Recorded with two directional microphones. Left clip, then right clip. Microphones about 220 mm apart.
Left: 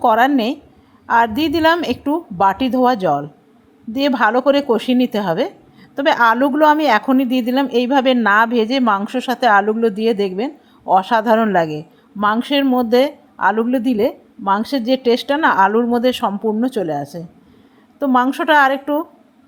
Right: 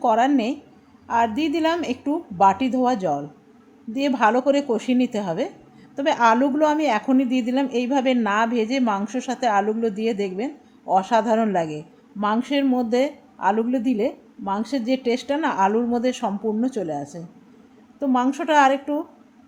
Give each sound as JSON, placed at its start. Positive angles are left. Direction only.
{"t": 0.0, "sound": "a woman's voice", "side_deg": 15}